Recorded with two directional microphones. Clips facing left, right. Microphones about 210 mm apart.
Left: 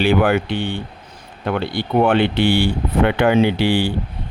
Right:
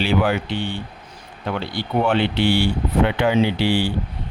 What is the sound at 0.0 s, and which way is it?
Speech, 55° left (ahead or behind).